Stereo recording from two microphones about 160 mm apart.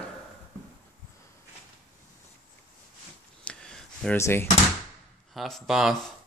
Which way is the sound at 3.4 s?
5° left (ahead or behind).